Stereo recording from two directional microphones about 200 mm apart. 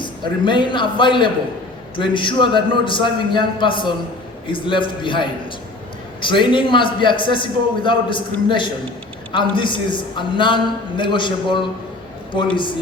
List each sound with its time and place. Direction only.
0.0 s a man's voice: 25° left (ahead or behind)